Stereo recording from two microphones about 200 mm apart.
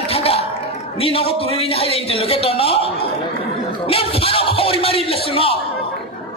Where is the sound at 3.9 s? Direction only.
30° left (ahead or behind).